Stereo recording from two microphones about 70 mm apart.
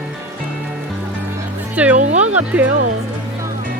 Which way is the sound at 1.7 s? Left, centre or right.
Right.